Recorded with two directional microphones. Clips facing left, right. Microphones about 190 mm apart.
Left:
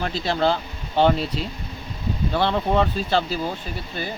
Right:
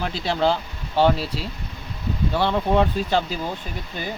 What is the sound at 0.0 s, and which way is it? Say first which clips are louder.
Speech: even; 10° right (ahead or behind).